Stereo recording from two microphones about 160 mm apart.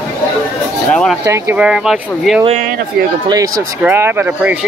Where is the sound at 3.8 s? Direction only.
10° right (ahead or behind).